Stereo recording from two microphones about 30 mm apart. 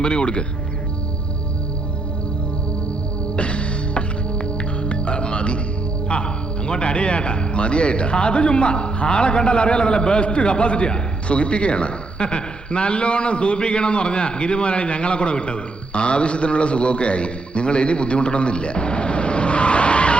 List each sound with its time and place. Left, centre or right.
0.0 s a man's voice: left
3.3 s music: left
6.1 s a man's voice: left